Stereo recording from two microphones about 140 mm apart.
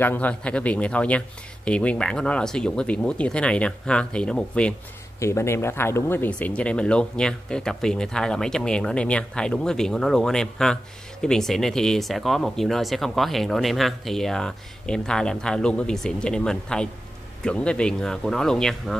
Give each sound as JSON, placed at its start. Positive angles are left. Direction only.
{"t": 0.0, "sound": "speech", "side_deg": 10}
{"t": 5.2, "sound": "speech", "side_deg": 20}